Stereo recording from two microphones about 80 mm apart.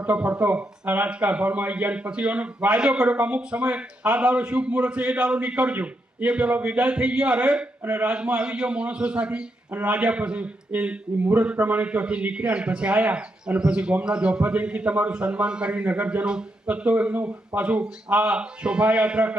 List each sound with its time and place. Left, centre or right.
0.0 s speech: centre